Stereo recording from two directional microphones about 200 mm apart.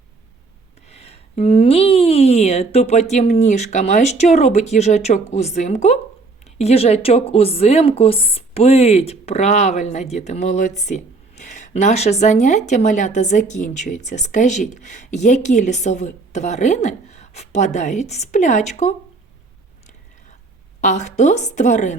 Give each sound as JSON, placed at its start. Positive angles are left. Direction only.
{"t": 0.9, "sound": "speech", "side_deg": 30}
{"t": 20.8, "sound": "speech", "side_deg": 35}